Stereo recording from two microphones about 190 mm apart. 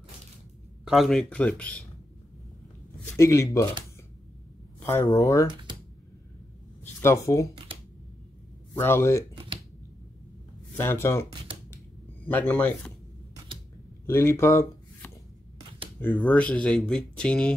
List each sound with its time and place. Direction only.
0.8 s speech: centre (ahead or behind)
3.2 s speech: 15° left (ahead or behind)
4.7 s a sound: 10° left (ahead or behind)
5.0 s speech: 15° left (ahead or behind)
5.5 s computer keyboard: 25° right (ahead or behind)
7.0 s speech: 15° left (ahead or behind)
8.7 s speech: 15° left (ahead or behind)
10.8 s speech: 15° left (ahead or behind)
12.3 s speech: 10° left (ahead or behind)
14.0 s speech: 15° left (ahead or behind)
16.2 s speech: 5° left (ahead or behind)